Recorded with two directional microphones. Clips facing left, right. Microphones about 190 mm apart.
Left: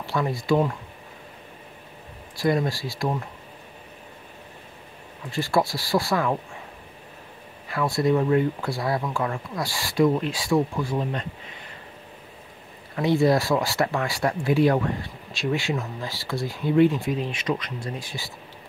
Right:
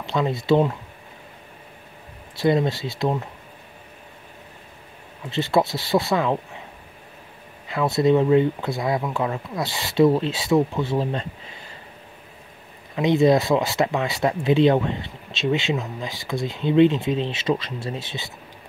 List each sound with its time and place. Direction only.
0.0 s speech: 20° right (ahead or behind)
2.3 s speech: 25° right (ahead or behind)
5.3 s speech: 20° right (ahead or behind)
7.6 s speech: 20° right (ahead or behind)
12.9 s speech: 20° right (ahead or behind)